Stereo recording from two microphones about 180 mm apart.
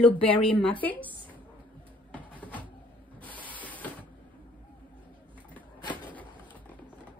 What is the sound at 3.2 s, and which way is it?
Printer, 10° left (ahead or behind).